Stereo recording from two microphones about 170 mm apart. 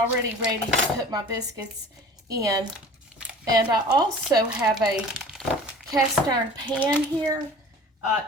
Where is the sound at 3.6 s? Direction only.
25° right (ahead or behind).